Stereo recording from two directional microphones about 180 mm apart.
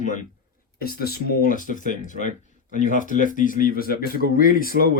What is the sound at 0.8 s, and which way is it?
A man's voice, 60° left (ahead or behind).